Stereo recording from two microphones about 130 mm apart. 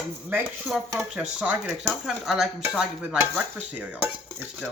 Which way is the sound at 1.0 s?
10° right (ahead or behind).